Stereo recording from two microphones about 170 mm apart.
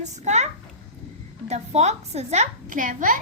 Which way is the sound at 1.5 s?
40° right (ahead or behind).